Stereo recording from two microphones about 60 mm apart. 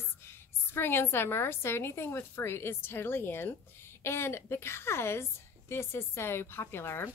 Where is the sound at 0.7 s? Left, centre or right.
Left.